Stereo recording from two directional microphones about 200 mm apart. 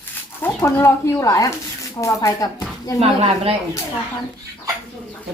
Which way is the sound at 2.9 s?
30° right (ahead or behind).